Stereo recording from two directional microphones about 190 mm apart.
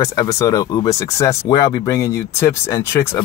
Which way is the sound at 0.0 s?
15° left (ahead or behind).